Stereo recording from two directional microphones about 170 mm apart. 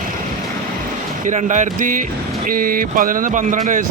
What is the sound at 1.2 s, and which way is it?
A man's voice, 45° right (ahead or behind).